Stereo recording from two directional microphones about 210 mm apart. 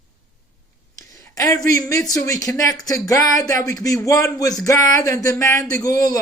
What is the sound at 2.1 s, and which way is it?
Speech, 15° left (ahead or behind).